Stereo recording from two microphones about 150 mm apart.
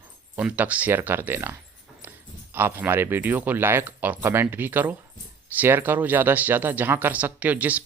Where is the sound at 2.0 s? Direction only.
10° right (ahead or behind).